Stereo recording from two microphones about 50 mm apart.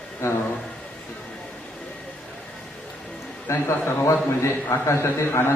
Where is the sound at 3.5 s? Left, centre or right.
Left.